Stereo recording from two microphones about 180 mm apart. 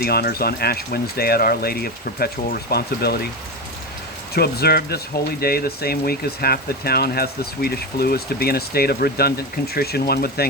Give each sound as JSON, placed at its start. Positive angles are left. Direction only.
{"t": 0.0, "sound": "speech", "side_deg": 60}
{"t": 4.4, "sound": "speech", "side_deg": 60}